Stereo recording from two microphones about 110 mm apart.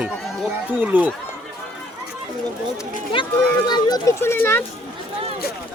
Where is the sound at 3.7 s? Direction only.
40° left (ahead or behind).